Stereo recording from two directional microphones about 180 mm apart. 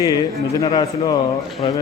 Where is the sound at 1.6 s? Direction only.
30° left (ahead or behind).